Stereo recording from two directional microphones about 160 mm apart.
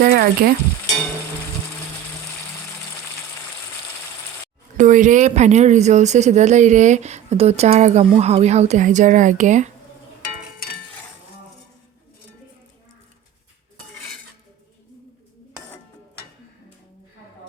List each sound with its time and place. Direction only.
0.0 s frying: 70° right (ahead or behind)
4.8 s speech: 50° right (ahead or behind)